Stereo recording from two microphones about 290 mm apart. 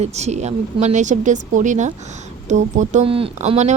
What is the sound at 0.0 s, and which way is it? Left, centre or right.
Speech, right.